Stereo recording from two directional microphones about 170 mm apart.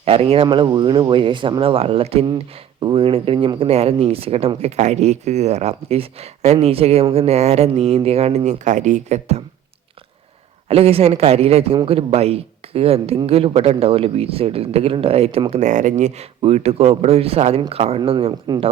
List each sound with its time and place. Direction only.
0.0 s speech: 35° right (ahead or behind)
10.7 s speech: 35° right (ahead or behind)